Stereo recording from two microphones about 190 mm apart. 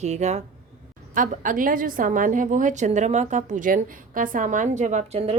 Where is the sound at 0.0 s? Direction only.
35° right (ahead or behind).